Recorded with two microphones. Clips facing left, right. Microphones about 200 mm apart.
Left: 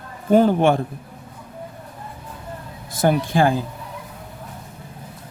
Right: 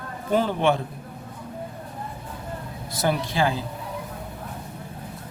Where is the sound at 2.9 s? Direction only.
50° left (ahead or behind).